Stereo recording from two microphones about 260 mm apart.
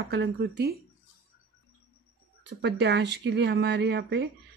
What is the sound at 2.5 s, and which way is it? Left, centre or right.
A woman's voice, right.